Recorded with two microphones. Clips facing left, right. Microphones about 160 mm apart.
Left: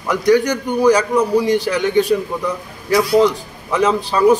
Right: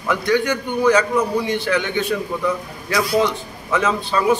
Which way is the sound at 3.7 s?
35° left (ahead or behind).